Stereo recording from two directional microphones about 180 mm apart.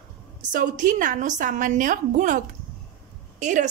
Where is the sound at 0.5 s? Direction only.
45° right (ahead or behind).